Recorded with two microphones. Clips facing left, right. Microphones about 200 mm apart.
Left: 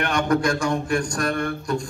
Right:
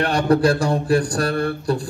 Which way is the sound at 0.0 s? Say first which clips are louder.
Right 4 dB; 35° right (ahead or behind).